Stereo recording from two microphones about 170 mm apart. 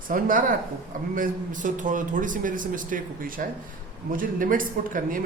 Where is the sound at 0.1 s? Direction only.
55° right (ahead or behind).